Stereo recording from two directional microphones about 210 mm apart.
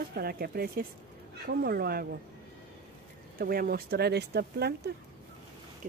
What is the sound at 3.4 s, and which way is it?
Speech, 45° right (ahead or behind).